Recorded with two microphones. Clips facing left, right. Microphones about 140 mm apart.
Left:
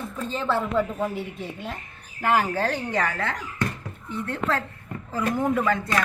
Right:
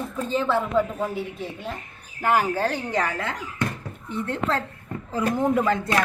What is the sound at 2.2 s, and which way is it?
Speech, 10° right (ahead or behind).